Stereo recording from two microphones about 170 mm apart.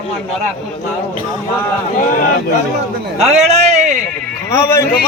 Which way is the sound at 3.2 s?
40° right (ahead or behind).